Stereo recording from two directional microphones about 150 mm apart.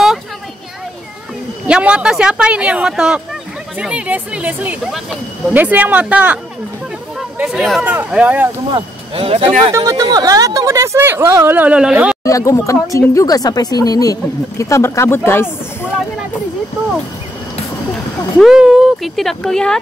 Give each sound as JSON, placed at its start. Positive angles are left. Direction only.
{"t": 1.7, "sound": "speech", "side_deg": -5}
{"t": 8.7, "sound": "speech", "side_deg": -40}
{"t": 9.7, "sound": "speech", "side_deg": -25}
{"t": 12.2, "sound": "a woman's voice", "side_deg": 20}
{"t": 18.4, "sound": "speech", "side_deg": -5}